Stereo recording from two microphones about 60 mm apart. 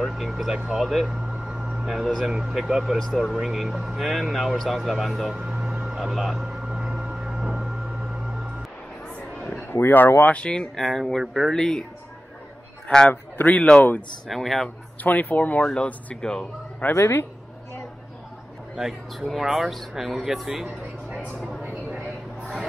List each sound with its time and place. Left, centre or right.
0.0 s speech: centre
3.3 s speech: centre
5.5 s vehicle: centre
9.6 s speech: left
10.3 s speech: centre
11.5 s speech: centre
12.8 s a man's voice: centre
14.2 s speech: centre
15.0 s speech: left
15.7 s speech: centre
16.9 s speech: left
18.8 s speech: centre